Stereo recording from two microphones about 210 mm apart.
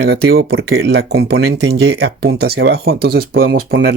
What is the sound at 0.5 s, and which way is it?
Speech, 65° right (ahead or behind).